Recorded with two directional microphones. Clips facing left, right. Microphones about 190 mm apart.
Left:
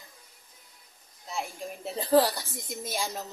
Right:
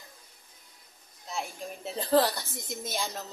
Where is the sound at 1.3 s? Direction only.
5° left (ahead or behind).